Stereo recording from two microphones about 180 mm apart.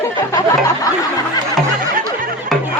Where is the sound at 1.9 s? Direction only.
50° right (ahead or behind).